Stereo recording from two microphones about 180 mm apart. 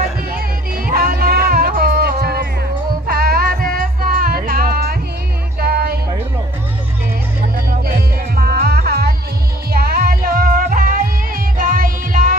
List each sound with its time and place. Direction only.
0.3 s music: 55° right (ahead or behind)
7.8 s music: 55° right (ahead or behind)